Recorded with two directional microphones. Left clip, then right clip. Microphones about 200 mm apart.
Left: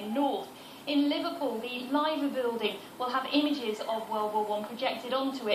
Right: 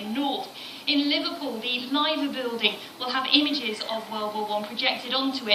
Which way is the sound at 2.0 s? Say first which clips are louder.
Right 2 dB; 20° left (ahead or behind).